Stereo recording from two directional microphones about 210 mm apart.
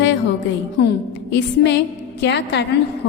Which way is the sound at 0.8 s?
50° left (ahead or behind).